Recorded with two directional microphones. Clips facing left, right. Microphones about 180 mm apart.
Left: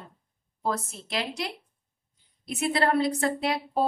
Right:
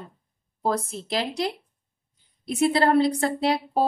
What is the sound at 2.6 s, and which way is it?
A woman's voice, 35° right (ahead or behind).